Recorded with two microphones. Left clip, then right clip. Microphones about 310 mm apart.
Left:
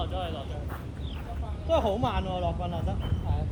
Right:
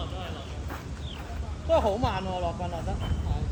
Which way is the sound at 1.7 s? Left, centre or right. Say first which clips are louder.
Right 2 dB; centre.